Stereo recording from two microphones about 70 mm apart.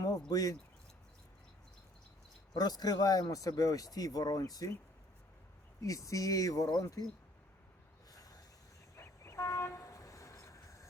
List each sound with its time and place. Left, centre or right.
0.3 s speech: left
2.6 s speech: left
5.8 s speech: left
8.1 s a sound: left
9.0 s train: left